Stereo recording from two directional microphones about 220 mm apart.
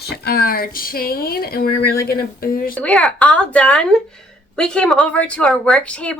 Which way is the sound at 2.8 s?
5° left (ahead or behind).